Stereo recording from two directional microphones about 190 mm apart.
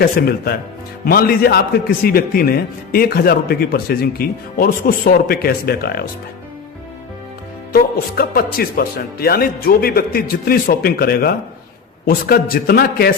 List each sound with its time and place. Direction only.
0.0 s a man's voice: 55° left (ahead or behind)
7.7 s a man's voice: 55° left (ahead or behind)